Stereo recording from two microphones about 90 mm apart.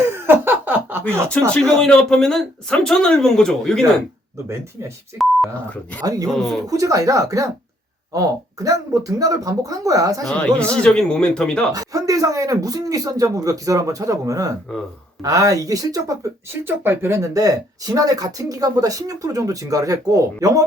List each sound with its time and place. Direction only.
0.0 s a sound: 25° right (ahead or behind)
1.3 s a man's voice: 10° left (ahead or behind)
6.0 s speech: 40° right (ahead or behind)
6.3 s speech: centre (ahead or behind)
6.7 s speech: 40° right (ahead or behind)
10.3 s a man's voice: 15° left (ahead or behind)
11.7 s speech: 40° right (ahead or behind)
16.6 s speech: 25° right (ahead or behind); by 20.7 s 40° right (ahead or behind)